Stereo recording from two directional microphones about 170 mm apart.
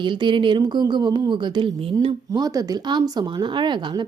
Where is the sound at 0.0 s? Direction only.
30° right (ahead or behind).